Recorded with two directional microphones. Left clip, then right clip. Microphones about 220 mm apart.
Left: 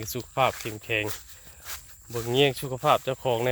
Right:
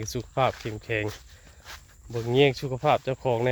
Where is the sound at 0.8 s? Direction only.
10° right (ahead or behind).